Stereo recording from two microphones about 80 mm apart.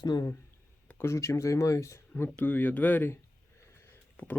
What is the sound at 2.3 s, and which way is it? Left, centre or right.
Speech, left.